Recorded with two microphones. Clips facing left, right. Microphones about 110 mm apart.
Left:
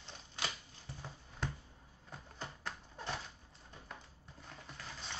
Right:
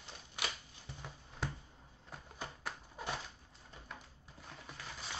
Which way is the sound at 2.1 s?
10° right (ahead or behind).